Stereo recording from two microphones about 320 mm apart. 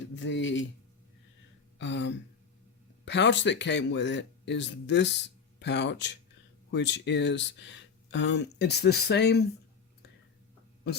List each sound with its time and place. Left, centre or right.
0.1 s speech: left
1.8 s a sound: left
3.0 s speech: left
10.8 s a woman's voice: left